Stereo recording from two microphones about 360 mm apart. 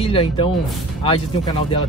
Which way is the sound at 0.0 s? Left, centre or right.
Centre.